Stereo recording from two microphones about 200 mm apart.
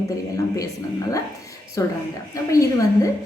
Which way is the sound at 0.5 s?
15° left (ahead or behind).